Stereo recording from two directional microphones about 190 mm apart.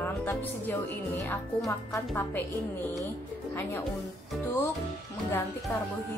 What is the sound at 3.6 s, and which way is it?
Speech, 10° left (ahead or behind).